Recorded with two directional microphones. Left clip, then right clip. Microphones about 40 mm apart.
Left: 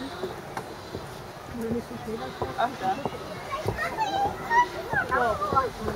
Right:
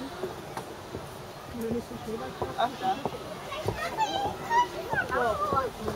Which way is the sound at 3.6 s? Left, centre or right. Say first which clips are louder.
Left 1 dB; right.